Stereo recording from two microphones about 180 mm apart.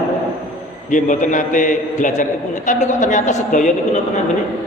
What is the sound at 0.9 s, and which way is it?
A man's voice, 45° left (ahead or behind).